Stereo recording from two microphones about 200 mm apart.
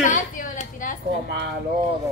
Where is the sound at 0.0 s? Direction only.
40° left (ahead or behind).